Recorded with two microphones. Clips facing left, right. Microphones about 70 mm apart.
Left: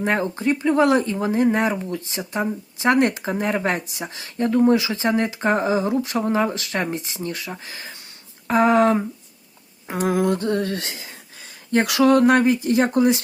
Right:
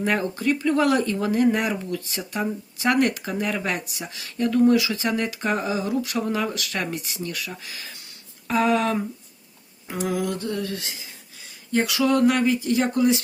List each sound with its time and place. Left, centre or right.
0.0 s speech: left